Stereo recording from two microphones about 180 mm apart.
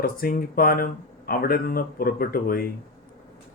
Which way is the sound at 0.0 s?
55° left (ahead or behind).